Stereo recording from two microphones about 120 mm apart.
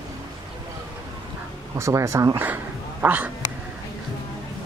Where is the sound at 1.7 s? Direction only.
25° right (ahead or behind).